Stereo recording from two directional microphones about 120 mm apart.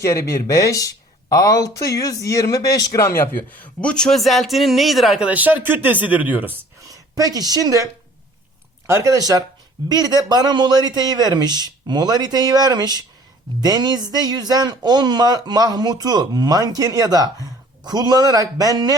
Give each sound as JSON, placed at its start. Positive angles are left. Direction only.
{"t": 0.0, "sound": "speech", "side_deg": 25}
{"t": 3.5, "sound": "speech", "side_deg": 10}
{"t": 6.8, "sound": "speech", "side_deg": -30}
{"t": 8.9, "sound": "speech", "side_deg": -25}